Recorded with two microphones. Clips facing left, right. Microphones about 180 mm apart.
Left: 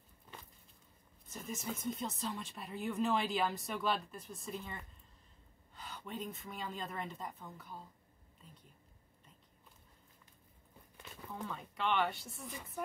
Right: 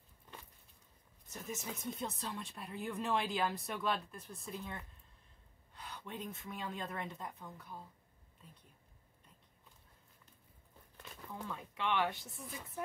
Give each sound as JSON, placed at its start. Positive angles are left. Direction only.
{"t": 1.3, "sound": "speech", "side_deg": 0}
{"t": 6.0, "sound": "speech", "side_deg": 0}
{"t": 11.4, "sound": "speech", "side_deg": 0}